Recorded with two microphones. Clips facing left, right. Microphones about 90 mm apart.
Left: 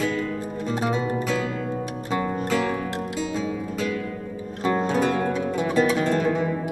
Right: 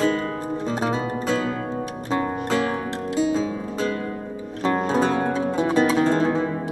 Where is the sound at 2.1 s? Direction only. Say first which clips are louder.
Right 1 dB; 25° right (ahead or behind).